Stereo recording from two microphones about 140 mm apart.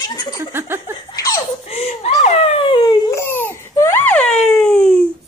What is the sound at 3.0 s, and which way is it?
Crying, 20° left (ahead or behind).